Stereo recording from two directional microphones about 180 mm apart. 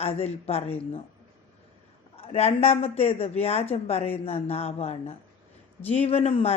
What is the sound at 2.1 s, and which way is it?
A man's voice, 35° left (ahead or behind).